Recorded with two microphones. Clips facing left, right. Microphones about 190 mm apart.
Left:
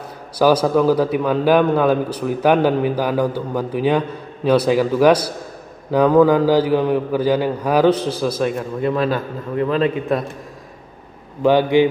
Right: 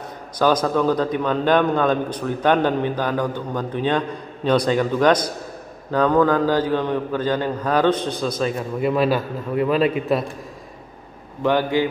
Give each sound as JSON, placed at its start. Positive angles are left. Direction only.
{"t": 0.4, "sound": "a man's voice", "side_deg": 10}
{"t": 8.5, "sound": "a man's voice", "side_deg": -10}
{"t": 11.4, "sound": "a man's voice", "side_deg": 15}